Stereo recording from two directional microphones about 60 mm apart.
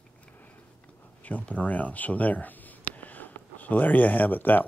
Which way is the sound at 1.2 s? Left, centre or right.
Left.